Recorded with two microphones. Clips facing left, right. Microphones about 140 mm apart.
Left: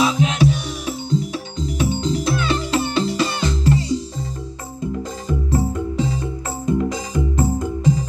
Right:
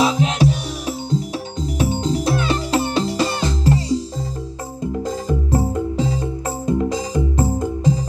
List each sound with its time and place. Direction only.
0.0 s music: 35° right (ahead or behind)
5.5 s music: 35° right (ahead or behind)